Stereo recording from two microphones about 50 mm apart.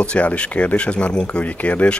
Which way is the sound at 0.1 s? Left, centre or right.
Left.